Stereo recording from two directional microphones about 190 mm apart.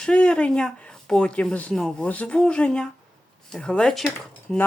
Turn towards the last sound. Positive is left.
turn(degrees=0)  # may be behind; listen again after turning